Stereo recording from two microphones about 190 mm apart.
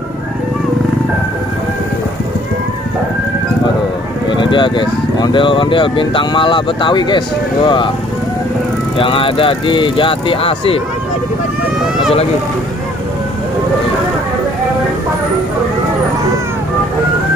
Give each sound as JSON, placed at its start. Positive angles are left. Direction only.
{"t": 4.3, "sound": "speech", "side_deg": 25}
{"t": 8.9, "sound": "speech", "side_deg": 30}